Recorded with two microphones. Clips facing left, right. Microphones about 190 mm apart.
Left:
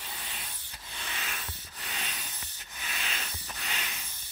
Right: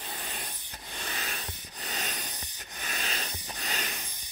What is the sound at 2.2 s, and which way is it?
Sanding, 15° right (ahead or behind).